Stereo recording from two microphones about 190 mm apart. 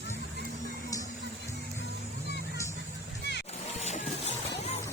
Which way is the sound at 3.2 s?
65° left (ahead or behind).